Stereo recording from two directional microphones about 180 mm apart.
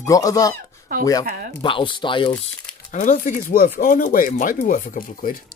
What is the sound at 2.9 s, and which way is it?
Speech, 45° left (ahead or behind).